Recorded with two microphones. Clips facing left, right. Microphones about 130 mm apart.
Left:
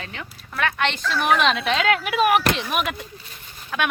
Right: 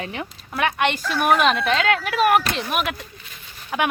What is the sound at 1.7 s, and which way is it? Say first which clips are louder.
Speech: even; 30° right (ahead or behind).